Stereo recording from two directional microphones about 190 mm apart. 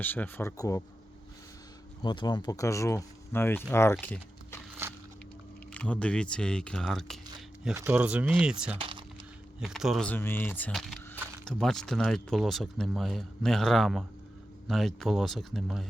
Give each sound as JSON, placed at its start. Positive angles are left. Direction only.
{"t": 0.0, "sound": "speech", "side_deg": 10}
{"t": 2.0, "sound": "speech", "side_deg": 20}
{"t": 4.0, "sound": "a sound", "side_deg": 10}
{"t": 5.7, "sound": "speech", "side_deg": 5}
{"t": 7.7, "sound": "speech", "side_deg": -10}
{"t": 8.8, "sound": "a sound", "side_deg": -25}
{"t": 9.6, "sound": "speech", "side_deg": 0}